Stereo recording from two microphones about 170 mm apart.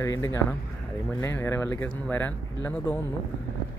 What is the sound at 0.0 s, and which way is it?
Speech, 20° left (ahead or behind).